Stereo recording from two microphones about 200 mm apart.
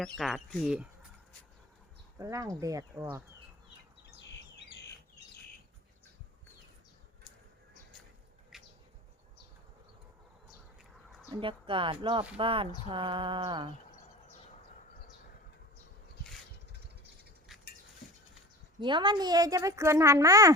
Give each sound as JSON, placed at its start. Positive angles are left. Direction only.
{"t": 0.0, "sound": "speech", "side_deg": 0}
{"t": 2.1, "sound": "speech", "side_deg": -15}
{"t": 4.2, "sound": "bird vocalization", "side_deg": 60}
{"t": 8.5, "sound": "bird", "side_deg": 0}
{"t": 11.3, "sound": "speech", "side_deg": -25}
{"t": 18.8, "sound": "speech", "side_deg": -25}